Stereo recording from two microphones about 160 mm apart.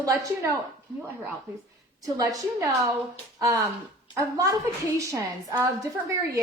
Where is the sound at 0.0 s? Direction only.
20° right (ahead or behind).